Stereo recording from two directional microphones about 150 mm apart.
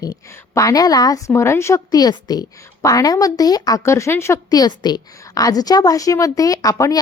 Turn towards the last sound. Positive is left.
turn(degrees=20)  # may be behind; listen again after turning